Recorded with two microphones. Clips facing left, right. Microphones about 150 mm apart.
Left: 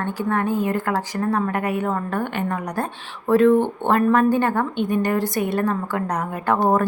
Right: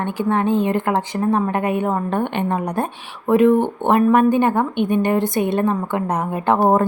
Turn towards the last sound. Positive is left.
turn(degrees=-25)  # may be behind; listen again after turning